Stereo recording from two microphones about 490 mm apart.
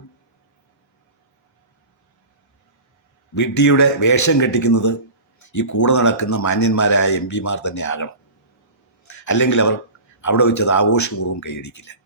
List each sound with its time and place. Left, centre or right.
3.3 s a man's voice: left